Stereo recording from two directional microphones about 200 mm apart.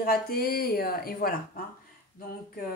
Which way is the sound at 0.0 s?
50° left (ahead or behind).